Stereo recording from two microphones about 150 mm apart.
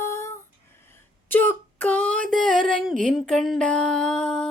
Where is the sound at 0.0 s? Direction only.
20° left (ahead or behind).